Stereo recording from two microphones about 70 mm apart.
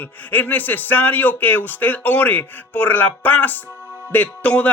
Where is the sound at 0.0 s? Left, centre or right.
Left.